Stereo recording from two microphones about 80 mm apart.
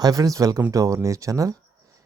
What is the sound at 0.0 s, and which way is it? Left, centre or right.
Speech, right.